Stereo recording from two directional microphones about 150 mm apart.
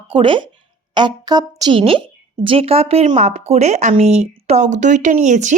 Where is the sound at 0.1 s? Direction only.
35° right (ahead or behind).